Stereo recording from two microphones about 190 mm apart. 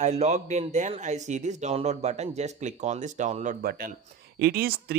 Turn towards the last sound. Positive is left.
turn(degrees=-50)  # may be behind; listen again after turning